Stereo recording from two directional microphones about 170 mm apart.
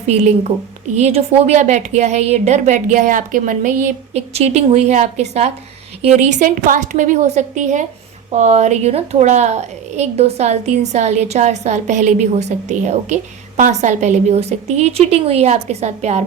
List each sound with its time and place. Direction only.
0.1 s a woman's voice: 40° right (ahead or behind)
4.4 s a woman's voice: 40° right (ahead or behind)